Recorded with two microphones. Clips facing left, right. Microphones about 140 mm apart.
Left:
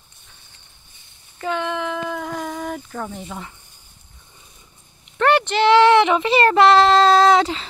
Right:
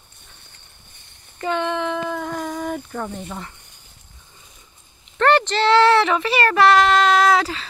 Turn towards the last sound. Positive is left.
turn(degrees=25)  # may be behind; listen again after turning